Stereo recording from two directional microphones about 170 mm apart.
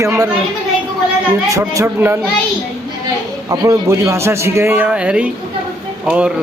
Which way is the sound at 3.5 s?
20° right (ahead or behind).